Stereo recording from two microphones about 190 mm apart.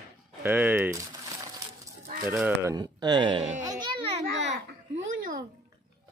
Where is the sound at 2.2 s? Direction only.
10° right (ahead or behind).